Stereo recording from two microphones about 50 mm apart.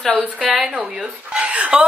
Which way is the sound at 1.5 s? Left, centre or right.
Right.